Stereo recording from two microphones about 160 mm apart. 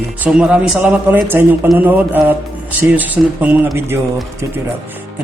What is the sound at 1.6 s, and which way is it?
Speech, centre (ahead or behind).